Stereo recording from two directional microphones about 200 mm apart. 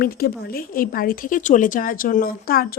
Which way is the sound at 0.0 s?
50° left (ahead or behind).